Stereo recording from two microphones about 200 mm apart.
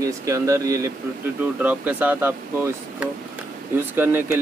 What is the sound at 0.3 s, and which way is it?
Speech, 15° right (ahead or behind).